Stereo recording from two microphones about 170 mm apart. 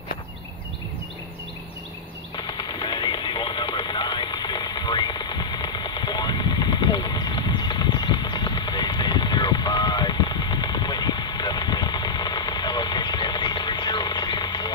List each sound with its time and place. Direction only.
2.3 s music: 25° left (ahead or behind)